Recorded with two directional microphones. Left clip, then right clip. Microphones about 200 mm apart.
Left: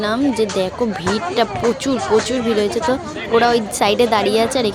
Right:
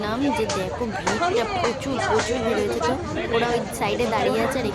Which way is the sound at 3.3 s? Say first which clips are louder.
Left 9 dB; 30° left (ahead or behind).